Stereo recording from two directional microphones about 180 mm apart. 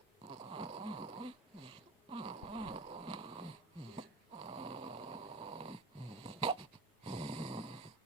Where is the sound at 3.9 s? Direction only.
30° right (ahead or behind).